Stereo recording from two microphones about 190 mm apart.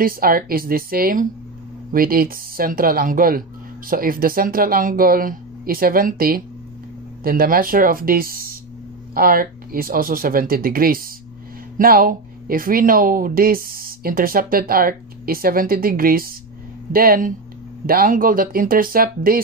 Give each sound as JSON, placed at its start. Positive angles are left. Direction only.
{"t": 0.0, "sound": "speech", "side_deg": -50}